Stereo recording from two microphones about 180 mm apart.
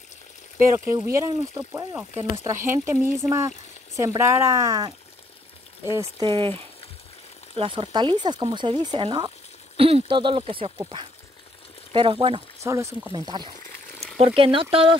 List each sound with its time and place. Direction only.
0.9 s speech: 15° right (ahead or behind)
6.2 s speech: 30° right (ahead or behind)
12.6 s speech: 15° right (ahead or behind)